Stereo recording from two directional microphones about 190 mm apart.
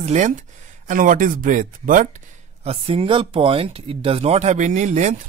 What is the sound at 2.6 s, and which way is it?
Speech, 30° right (ahead or behind).